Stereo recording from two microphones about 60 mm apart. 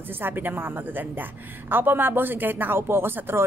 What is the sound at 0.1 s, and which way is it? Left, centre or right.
A woman's voice, right.